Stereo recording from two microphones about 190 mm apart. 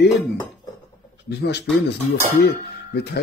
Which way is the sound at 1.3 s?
60° left (ahead or behind).